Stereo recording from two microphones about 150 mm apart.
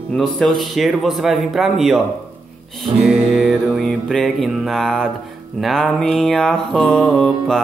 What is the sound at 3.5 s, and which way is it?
Speech, centre (ahead or behind).